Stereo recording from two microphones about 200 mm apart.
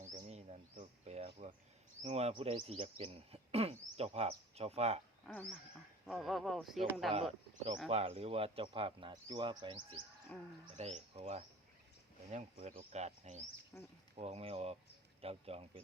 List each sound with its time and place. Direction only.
0.0 s a sound: 35° right (ahead or behind)
2.0 s a man's voice: 30° right (ahead or behind)
5.2 s frog: 5° left (ahead or behind)
6.1 s speech: centre (ahead or behind)
7.9 s speech: 30° right (ahead or behind)
10.3 s speech: 5° left (ahead or behind)
10.8 s a man's voice: 35° right (ahead or behind)
13.7 s speech: 5° left (ahead or behind)
14.2 s a man's voice: 30° right (ahead or behind)